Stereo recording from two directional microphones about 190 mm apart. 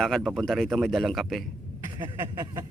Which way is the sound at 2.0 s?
20° right (ahead or behind).